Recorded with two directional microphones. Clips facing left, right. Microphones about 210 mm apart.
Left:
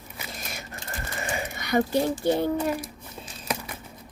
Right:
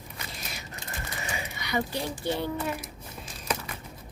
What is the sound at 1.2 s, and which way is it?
Speech, 50° left (ahead or behind).